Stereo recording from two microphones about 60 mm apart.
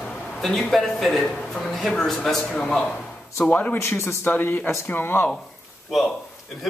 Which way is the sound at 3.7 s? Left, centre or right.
Left.